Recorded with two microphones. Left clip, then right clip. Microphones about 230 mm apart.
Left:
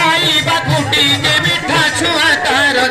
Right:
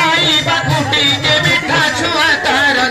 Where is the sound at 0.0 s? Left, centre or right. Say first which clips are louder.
Even; left.